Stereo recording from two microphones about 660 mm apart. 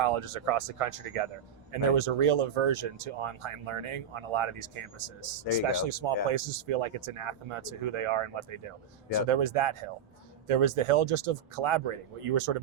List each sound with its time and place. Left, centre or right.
0.0 s speech: right